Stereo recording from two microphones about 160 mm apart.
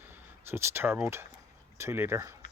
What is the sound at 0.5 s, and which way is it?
Speech, 15° right (ahead or behind).